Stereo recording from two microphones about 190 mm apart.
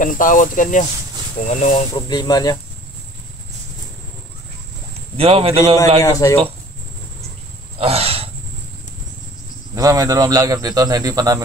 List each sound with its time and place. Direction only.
0.0 s speech: 45° left (ahead or behind)
2.0 s speech: 20° left (ahead or behind)
5.1 s speech: 30° right (ahead or behind)
6.0 s speech: 15° left (ahead or behind)
7.8 s a sound: 30° right (ahead or behind)
9.8 s speech: 20° right (ahead or behind)